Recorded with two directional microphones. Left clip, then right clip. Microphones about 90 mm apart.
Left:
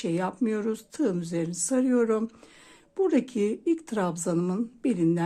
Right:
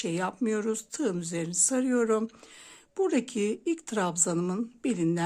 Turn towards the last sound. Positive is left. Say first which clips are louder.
# left 3 dB
turn(degrees=-25)  # may be behind; listen again after turning